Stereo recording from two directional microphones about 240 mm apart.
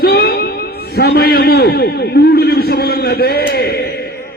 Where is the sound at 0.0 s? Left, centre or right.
Left.